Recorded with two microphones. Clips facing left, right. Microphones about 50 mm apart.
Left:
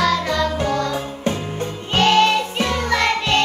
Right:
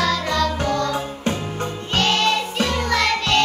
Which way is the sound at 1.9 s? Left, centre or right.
Centre.